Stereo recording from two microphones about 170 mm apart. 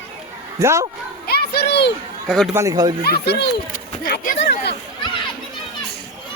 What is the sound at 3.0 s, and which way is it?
Speech, 70° left (ahead or behind).